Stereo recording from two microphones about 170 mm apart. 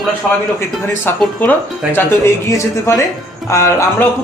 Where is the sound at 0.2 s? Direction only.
5° left (ahead or behind).